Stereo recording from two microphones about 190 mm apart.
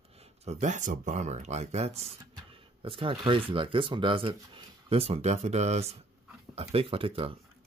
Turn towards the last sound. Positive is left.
turn(degrees=-30)  # may be behind; listen again after turning